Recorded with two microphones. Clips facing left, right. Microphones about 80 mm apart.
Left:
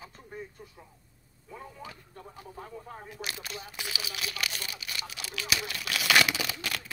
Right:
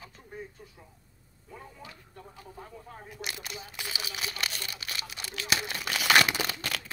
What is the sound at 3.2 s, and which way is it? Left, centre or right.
Single-lens reflex camera, centre.